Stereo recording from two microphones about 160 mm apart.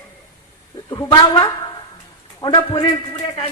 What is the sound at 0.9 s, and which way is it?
A man's voice, 25° left (ahead or behind).